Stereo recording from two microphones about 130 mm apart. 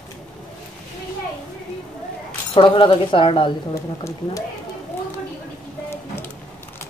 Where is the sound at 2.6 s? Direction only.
40° left (ahead or behind).